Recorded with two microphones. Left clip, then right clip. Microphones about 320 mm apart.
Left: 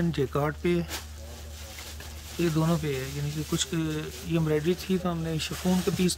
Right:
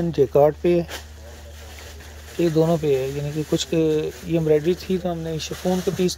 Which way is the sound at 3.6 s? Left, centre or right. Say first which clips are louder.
Right 12 dB; centre.